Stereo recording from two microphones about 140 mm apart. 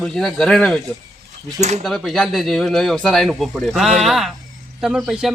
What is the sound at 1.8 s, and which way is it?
Speech, centre (ahead or behind).